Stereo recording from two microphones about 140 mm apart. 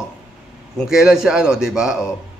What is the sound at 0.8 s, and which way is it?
A man's voice, 5° right (ahead or behind).